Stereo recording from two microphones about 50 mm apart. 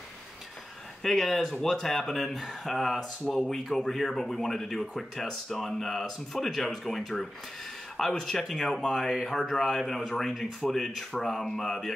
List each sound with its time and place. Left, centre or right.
1.0 s speech: centre